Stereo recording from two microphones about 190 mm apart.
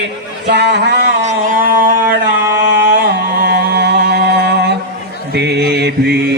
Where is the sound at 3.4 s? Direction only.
60° right (ahead or behind).